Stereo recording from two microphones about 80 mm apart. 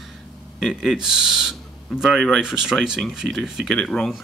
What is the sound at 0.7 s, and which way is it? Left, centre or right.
Speech, centre.